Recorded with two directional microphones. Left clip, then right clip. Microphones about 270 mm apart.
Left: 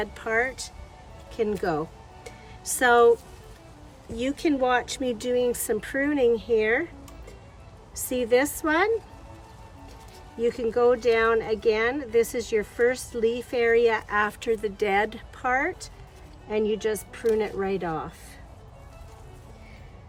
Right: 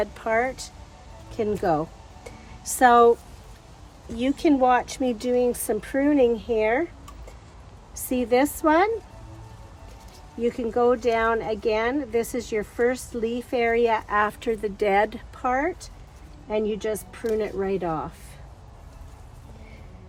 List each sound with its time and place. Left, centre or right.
0.0 s speech: centre
4.2 s speech: centre
8.1 s speech: centre
10.4 s speech: centre
17.1 s speech: centre